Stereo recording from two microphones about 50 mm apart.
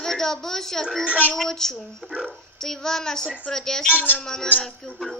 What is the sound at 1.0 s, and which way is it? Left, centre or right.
Speech, right.